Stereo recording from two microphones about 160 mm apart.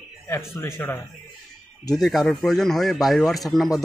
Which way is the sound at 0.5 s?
15° left (ahead or behind).